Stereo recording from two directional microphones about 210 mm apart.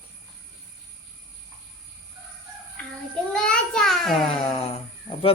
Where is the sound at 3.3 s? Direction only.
5° left (ahead or behind).